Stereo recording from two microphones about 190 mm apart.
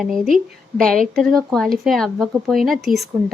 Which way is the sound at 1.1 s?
Centre (ahead or behind).